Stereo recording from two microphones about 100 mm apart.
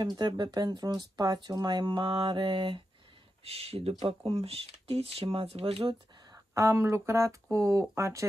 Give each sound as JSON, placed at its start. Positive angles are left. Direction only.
{"t": 0.0, "sound": "speech", "side_deg": -45}
{"t": 3.4, "sound": "speech", "side_deg": -90}
{"t": 4.3, "sound": "speech", "side_deg": -75}
{"t": 6.3, "sound": "speech", "side_deg": -30}